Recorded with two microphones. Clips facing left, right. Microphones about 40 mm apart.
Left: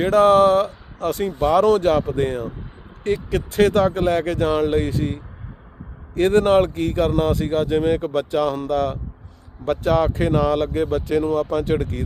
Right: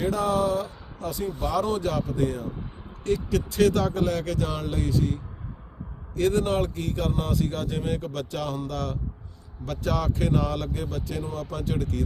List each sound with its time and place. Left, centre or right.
0.0 s speech: left
11.2 s speech: left
11.5 s speech: left